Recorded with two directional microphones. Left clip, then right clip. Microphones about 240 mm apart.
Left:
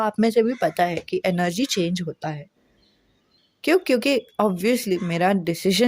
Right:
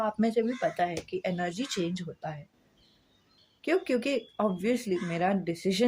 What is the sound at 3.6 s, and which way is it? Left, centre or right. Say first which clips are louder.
A woman's voice: left 9 dB; left.